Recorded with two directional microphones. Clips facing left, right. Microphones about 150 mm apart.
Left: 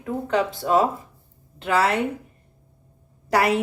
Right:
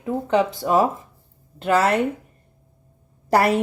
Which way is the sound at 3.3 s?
40° right (ahead or behind).